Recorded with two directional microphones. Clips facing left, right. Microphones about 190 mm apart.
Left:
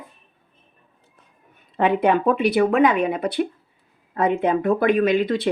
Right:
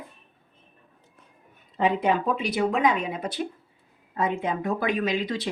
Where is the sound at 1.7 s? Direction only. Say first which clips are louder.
Left 5 dB; 65° left (ahead or behind).